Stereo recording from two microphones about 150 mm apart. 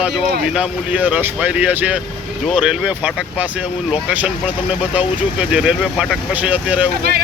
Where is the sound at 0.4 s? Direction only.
5° right (ahead or behind).